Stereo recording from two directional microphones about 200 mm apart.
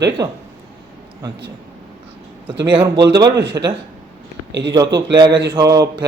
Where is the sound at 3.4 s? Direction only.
60° right (ahead or behind).